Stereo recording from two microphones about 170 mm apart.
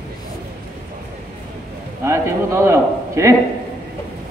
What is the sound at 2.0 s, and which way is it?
A man's voice, 15° right (ahead or behind).